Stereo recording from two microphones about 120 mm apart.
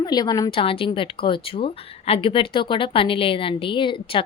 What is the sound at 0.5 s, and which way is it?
A woman's voice, 50° left (ahead or behind).